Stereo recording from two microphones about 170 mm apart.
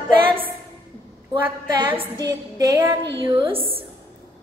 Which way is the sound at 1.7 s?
25° right (ahead or behind).